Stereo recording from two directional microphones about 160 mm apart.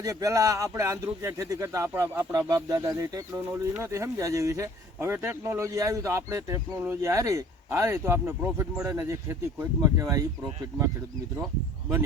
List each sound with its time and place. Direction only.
0.0 s speech: 20° right (ahead or behind)